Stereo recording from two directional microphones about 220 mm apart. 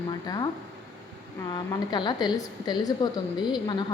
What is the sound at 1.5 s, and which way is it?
A woman's voice, 20° left (ahead or behind).